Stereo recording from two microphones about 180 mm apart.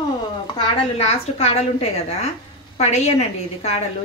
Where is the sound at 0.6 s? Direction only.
35° left (ahead or behind).